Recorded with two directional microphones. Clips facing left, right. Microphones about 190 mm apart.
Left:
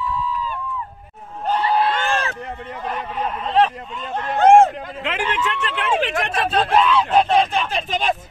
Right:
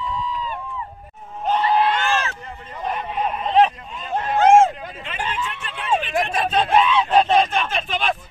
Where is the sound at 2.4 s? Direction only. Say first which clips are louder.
Left 6 dB; 65° left (ahead or behind).